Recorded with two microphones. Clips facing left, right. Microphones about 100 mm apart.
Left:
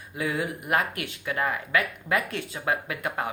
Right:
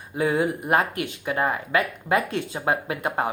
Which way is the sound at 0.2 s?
30° right (ahead or behind).